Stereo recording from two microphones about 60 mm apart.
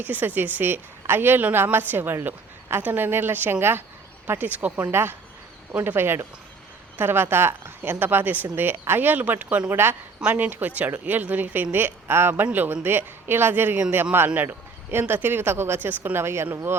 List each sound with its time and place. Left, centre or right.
0.0 s speech: right
2.2 s a sound: right
2.8 s speech: right
4.9 s speech: right
10.2 s speech: right
16.1 s speech: right